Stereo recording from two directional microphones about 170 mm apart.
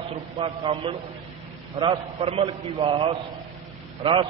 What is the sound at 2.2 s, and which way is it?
A man's voice, 35° right (ahead or behind).